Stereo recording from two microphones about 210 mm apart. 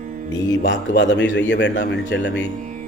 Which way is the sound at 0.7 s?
65° left (ahead or behind).